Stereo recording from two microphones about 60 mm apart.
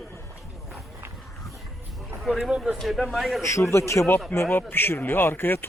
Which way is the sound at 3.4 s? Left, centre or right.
Left.